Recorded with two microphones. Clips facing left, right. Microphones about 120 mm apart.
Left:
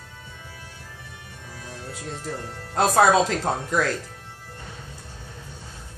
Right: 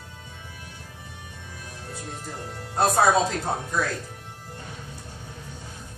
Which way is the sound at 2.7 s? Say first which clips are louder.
Left 2 dB; 90° left.